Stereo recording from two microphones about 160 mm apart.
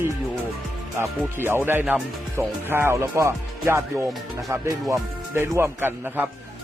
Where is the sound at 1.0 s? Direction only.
15° right (ahead or behind).